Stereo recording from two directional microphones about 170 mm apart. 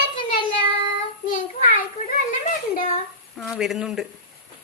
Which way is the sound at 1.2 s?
50° left (ahead or behind).